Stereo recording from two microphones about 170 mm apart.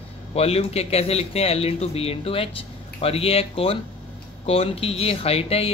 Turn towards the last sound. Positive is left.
turn(degrees=35)  # may be behind; listen again after turning